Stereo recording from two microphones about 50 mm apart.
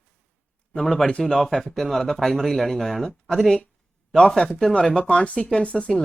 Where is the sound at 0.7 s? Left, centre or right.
Centre.